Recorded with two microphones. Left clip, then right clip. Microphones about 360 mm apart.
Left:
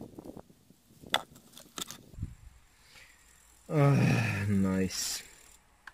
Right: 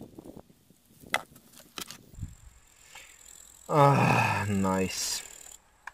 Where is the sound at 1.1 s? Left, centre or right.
Centre.